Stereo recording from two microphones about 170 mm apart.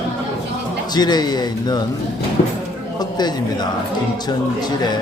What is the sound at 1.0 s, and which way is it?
Speech, 25° left (ahead or behind).